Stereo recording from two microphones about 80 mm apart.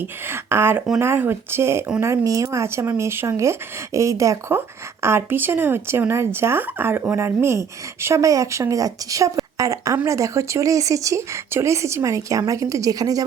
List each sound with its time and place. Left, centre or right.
0.0 s speech: right
5.0 s speech: right